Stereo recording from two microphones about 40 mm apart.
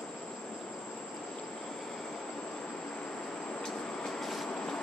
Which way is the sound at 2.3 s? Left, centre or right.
Left.